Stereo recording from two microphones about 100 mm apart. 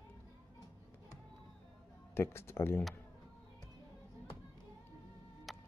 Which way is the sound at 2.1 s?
25° left (ahead or behind).